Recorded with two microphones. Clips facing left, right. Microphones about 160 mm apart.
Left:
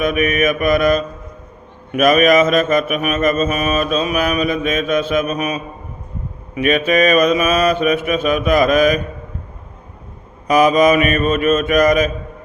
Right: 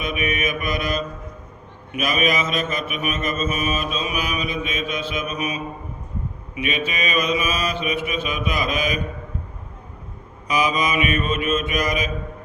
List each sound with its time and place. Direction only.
0.0 s mantra: 50° left (ahead or behind)
10.4 s mantra: 50° left (ahead or behind)